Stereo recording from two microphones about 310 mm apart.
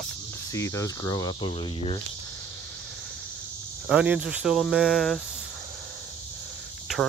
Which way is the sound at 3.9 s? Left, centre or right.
Centre.